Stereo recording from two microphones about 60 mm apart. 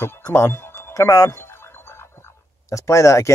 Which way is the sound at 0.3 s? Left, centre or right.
Left.